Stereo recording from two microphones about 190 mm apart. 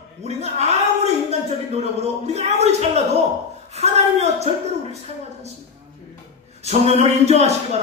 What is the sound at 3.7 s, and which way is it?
Speech, 35° right (ahead or behind).